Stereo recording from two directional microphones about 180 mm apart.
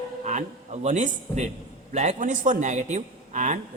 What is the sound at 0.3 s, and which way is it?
A man's voice, 40° right (ahead or behind).